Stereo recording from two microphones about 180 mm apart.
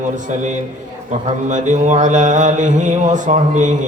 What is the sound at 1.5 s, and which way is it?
Mantra, 40° right (ahead or behind).